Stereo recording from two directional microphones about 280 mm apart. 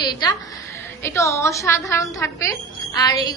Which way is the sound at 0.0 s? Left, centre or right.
Centre.